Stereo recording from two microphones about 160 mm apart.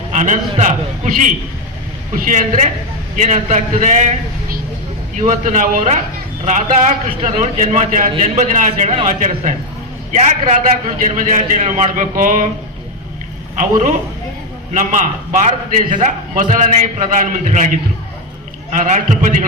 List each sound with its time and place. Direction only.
0.1 s a man's voice: 50° right (ahead or behind)
13.6 s a man's voice: 55° right (ahead or behind)